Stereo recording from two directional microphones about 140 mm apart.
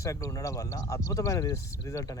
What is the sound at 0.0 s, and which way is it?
Speech, 25° left (ahead or behind).